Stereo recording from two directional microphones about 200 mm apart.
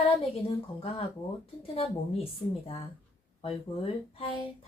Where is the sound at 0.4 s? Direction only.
30° left (ahead or behind).